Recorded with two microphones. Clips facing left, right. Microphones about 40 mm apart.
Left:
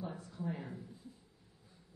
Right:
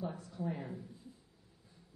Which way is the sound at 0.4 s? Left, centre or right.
Right.